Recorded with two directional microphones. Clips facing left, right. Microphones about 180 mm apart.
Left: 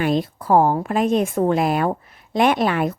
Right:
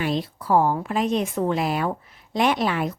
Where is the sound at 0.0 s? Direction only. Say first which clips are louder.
Left 5 dB; 50° left (ahead or behind).